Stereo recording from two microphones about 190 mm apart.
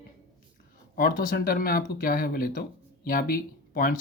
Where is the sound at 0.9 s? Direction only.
50° left (ahead or behind).